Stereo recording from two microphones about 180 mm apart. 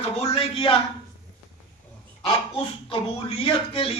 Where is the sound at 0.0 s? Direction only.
35° left (ahead or behind).